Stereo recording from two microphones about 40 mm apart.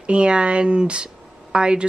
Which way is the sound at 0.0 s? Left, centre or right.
Right.